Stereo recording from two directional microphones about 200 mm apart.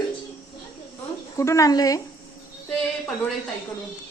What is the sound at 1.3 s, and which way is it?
Speech, 15° left (ahead or behind).